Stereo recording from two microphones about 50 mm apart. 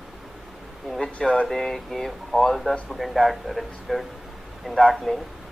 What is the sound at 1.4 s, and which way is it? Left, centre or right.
Speech, centre.